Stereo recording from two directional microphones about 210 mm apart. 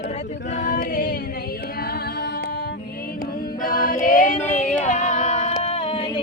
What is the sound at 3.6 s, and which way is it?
A capella, 45° left (ahead or behind).